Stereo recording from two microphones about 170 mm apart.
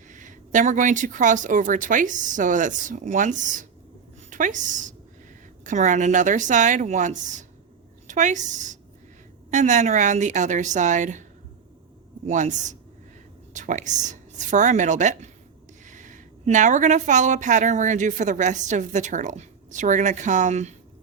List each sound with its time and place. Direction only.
0.1 s a woman's voice: 50° right (ahead or behind)
12.2 s a woman's voice: 45° right (ahead or behind)